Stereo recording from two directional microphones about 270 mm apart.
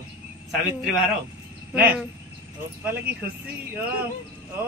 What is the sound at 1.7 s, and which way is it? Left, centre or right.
Speech, centre.